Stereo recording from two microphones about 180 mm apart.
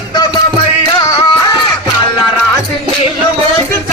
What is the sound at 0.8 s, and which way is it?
Music, 20° left (ahead or behind).